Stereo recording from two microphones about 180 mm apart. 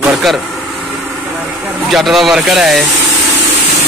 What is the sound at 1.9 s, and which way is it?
Speech, centre (ahead or behind).